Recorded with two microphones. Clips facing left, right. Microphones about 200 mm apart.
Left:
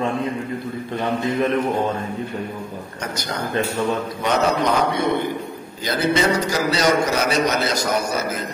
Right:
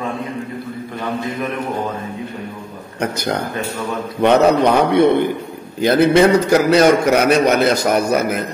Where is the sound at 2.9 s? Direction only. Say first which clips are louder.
Right 8 dB; 60° right (ahead or behind).